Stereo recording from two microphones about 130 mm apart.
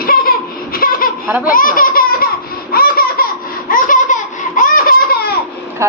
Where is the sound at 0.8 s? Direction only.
90° left.